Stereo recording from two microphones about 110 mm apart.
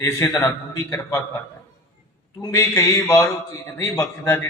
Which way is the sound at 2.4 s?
30° left (ahead or behind).